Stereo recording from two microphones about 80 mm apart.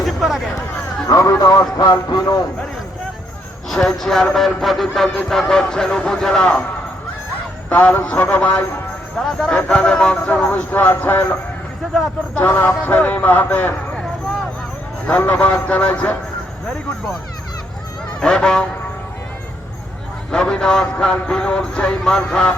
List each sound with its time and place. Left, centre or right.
0.0 s speech: centre
1.0 s a man's voice: left
3.7 s a man's voice: centre
7.7 s a man's voice: centre
15.2 s speech: left
18.2 s a man's voice: centre
20.3 s a man's voice: centre